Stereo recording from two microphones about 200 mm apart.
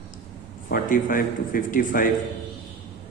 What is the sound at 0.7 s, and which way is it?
Speech, 45° left (ahead or behind).